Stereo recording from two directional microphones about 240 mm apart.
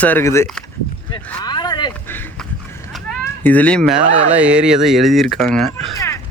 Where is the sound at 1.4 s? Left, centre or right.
Centre.